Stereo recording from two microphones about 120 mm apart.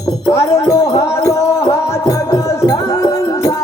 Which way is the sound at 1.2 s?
25° left (ahead or behind).